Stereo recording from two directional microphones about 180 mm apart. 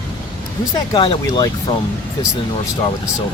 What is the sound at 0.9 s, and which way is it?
Speech, 30° left (ahead or behind).